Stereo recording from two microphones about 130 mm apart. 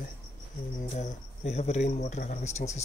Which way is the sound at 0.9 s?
60° left (ahead or behind).